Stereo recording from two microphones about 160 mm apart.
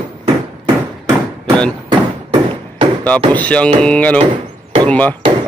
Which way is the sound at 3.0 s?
10° left (ahead or behind).